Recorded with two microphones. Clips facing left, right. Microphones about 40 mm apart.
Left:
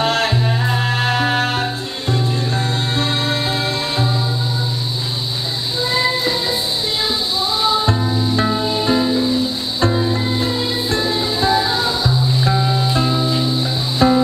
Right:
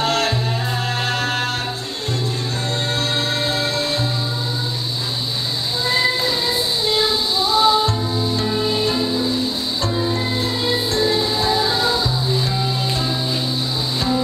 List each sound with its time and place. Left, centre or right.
0.0 s music: left
8.8 s music: left
13.9 s music: left